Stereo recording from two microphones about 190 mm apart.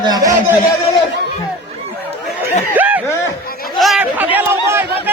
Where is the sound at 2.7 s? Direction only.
10° right (ahead or behind).